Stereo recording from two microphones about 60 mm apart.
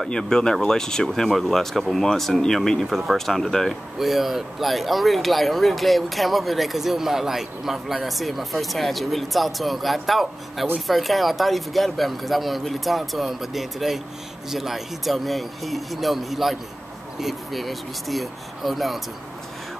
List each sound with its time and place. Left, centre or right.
0.1 s speech: centre